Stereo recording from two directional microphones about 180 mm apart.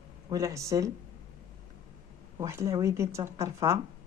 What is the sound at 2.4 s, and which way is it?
Speech, 15° right (ahead or behind).